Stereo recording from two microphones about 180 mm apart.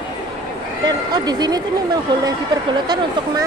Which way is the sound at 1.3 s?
20° right (ahead or behind).